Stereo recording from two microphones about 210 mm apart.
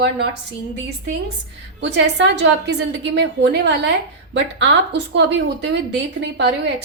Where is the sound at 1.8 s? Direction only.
55° right (ahead or behind).